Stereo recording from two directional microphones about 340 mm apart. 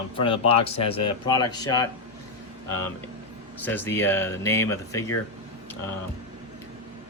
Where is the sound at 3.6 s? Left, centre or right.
Centre.